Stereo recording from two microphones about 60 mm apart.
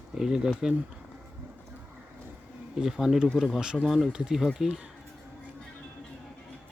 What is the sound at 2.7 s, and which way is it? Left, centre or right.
Speech, centre.